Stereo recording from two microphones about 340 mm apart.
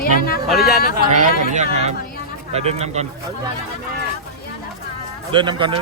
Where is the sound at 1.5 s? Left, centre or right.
Centre.